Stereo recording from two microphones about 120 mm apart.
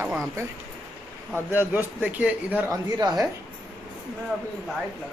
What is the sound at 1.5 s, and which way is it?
A man's voice, 15° right (ahead or behind).